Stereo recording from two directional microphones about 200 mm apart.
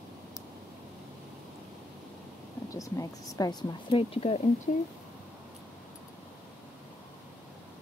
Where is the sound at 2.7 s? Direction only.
15° left (ahead or behind); by 4.8 s 40° left (ahead or behind).